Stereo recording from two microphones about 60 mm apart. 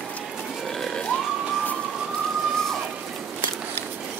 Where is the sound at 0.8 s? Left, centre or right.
Centre.